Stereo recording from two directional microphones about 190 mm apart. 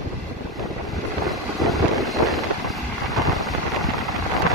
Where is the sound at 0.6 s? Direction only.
Centre (ahead or behind).